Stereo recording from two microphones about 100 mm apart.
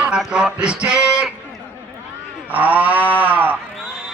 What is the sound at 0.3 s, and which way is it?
Speech, 10° right (ahead or behind).